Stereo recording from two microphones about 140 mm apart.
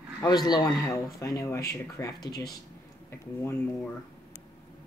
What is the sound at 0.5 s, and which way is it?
Speech, 25° left (ahead or behind).